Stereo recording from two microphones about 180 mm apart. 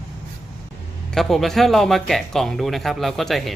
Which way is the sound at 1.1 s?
Centre (ahead or behind).